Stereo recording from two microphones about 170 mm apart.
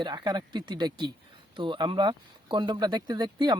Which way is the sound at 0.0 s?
25° right (ahead or behind).